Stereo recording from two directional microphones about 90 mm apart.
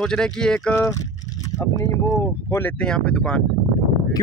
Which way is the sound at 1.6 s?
35° left (ahead or behind).